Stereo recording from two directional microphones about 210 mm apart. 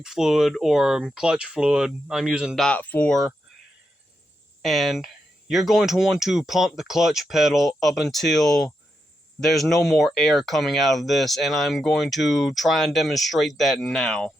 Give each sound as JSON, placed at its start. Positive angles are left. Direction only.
{"t": 0.0, "sound": "speech", "side_deg": 0}
{"t": 4.6, "sound": "speech", "side_deg": 0}